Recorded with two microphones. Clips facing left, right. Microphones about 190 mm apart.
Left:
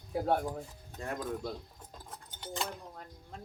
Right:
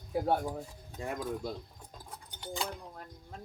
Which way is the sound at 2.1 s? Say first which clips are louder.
Right 2 dB; centre (ahead or behind).